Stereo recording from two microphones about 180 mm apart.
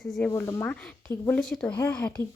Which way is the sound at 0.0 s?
Centre (ahead or behind).